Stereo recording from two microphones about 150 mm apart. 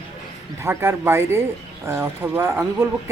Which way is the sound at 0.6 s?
15° right (ahead or behind).